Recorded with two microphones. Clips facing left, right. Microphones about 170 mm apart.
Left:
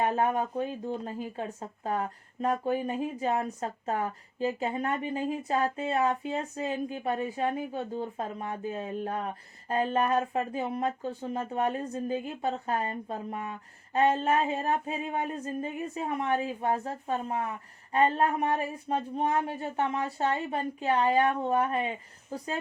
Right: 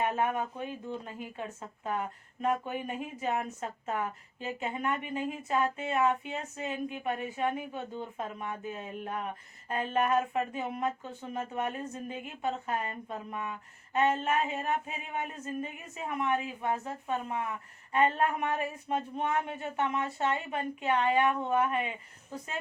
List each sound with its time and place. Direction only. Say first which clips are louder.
0.0 s speech: left 3 dB; 35° left (ahead or behind)